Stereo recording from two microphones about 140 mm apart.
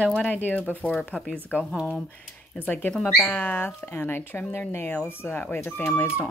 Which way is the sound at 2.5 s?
10° left (ahead or behind).